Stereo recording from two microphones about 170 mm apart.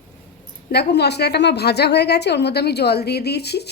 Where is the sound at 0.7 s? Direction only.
75° left (ahead or behind).